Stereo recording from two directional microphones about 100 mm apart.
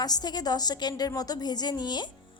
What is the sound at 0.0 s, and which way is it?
A woman's voice, 40° left (ahead or behind).